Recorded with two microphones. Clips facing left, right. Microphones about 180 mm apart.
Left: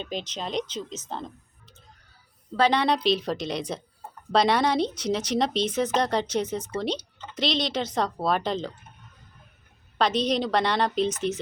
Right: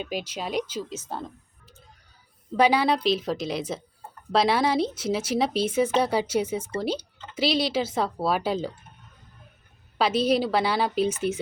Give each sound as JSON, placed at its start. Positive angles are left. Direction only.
{"t": 0.0, "sound": "speech", "side_deg": -10}
{"t": 2.6, "sound": "speech", "side_deg": -10}
{"t": 10.0, "sound": "speech", "side_deg": -5}